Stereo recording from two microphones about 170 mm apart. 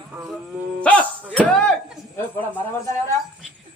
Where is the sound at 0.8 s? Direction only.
5° left (ahead or behind).